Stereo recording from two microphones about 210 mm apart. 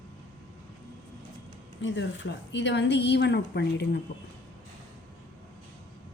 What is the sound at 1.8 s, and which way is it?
A woman's voice, 60° left (ahead or behind).